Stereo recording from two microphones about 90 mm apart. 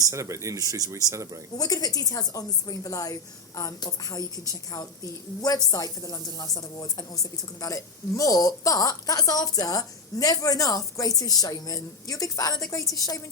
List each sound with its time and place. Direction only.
0.0 s speech: 35° right (ahead or behind)
1.5 s a woman's voice: 45° left (ahead or behind)